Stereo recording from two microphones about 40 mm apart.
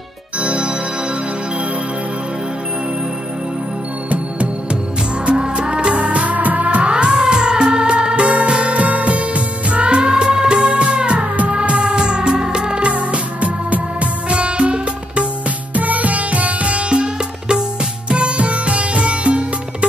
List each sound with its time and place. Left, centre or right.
0.4 s music: right
5.2 s music: right
6.9 s music: right
15.7 s sitar: right